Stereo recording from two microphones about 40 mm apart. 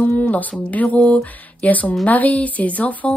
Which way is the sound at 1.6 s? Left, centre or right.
Left.